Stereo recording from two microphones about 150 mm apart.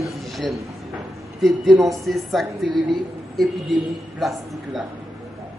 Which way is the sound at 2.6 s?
30° right (ahead or behind).